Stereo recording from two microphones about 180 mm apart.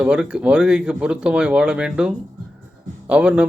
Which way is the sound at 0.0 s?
5° right (ahead or behind).